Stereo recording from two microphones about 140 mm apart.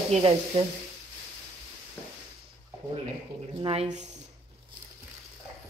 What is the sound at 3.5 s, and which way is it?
Speech, 45° right (ahead or behind).